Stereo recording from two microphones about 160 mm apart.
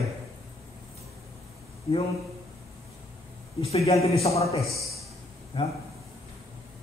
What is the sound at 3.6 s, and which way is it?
Speech, 40° left (ahead or behind).